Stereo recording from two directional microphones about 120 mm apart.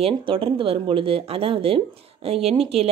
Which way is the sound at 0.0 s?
50° right (ahead or behind).